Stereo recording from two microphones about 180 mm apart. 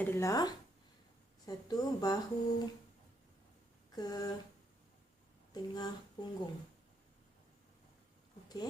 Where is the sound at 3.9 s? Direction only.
20° left (ahead or behind).